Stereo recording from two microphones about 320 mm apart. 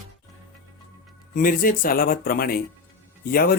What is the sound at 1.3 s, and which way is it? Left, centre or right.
Speech, left.